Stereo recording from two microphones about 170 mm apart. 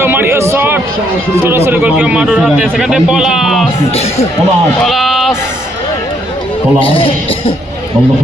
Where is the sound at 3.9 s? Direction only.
40° left (ahead or behind).